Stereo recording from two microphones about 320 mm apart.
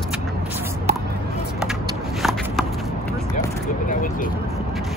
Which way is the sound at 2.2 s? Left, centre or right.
Centre.